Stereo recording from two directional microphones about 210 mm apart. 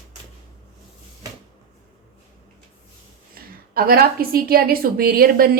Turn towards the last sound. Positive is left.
turn(degrees=-45)  # may be behind; listen again after turning